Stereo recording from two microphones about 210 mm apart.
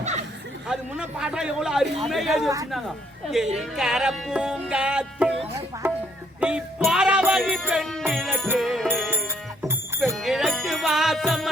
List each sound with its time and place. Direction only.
0.0 s chatter: 35° right (ahead or behind)
0.7 s a man's voice: 5° right (ahead or behind)
3.6 s a man's voice: centre (ahead or behind)
5.8 s music: 10° right (ahead or behind)
9.0 s music: 10° right (ahead or behind)
10.2 s music: centre (ahead or behind)